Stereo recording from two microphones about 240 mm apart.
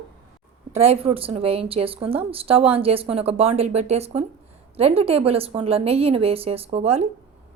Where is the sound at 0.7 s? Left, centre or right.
Right.